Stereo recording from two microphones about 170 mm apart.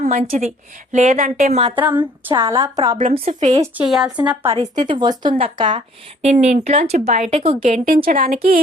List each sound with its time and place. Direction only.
0.0 s speech: 50° right (ahead or behind)
1.7 s speech: 10° right (ahead or behind)
3.0 s speech: 55° right (ahead or behind)
3.2 s speech: 40° right (ahead or behind)
3.8 s a woman's voice: centre (ahead or behind)
4.5 s speech: 25° right (ahead or behind)
6.2 s speech: 40° right (ahead or behind)
7.6 s speech: 55° right (ahead or behind)